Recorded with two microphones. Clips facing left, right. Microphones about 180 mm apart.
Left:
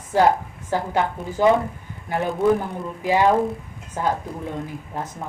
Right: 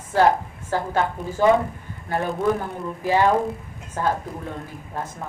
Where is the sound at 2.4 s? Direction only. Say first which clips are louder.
Left 4 dB; centre (ahead or behind).